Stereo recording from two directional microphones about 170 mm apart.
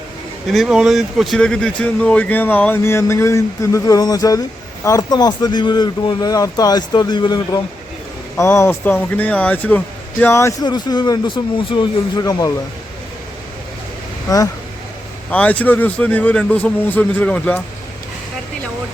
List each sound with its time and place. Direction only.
0.5 s speech: centre (ahead or behind); by 7.6 s 25° left (ahead or behind)
8.4 s speech: 15° left (ahead or behind)
14.3 s speech: 20° left (ahead or behind)
15.3 s speech: 10° left (ahead or behind)